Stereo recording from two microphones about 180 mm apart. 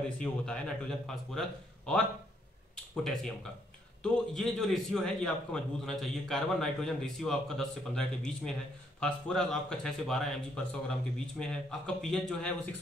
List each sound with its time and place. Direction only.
0.2 s a man's voice: 5° left (ahead or behind)
2.7 s a sound: 5° left (ahead or behind)
4.0 s a man's voice: centre (ahead or behind)